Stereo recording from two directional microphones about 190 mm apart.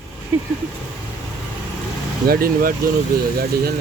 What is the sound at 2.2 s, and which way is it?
Speech, 50° right (ahead or behind).